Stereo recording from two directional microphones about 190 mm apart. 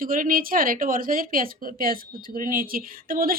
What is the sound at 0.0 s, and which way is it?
Speech, 45° right (ahead or behind).